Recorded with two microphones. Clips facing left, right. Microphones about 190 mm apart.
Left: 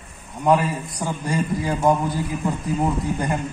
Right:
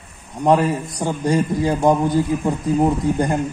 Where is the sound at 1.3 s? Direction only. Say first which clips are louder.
Right 5 dB; 30° right (ahead or behind).